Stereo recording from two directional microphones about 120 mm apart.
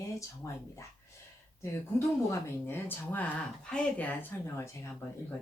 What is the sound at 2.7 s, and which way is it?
Speech, 15° left (ahead or behind).